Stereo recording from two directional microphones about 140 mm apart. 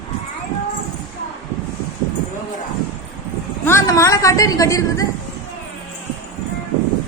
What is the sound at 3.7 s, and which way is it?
A woman's voice, 20° left (ahead or behind).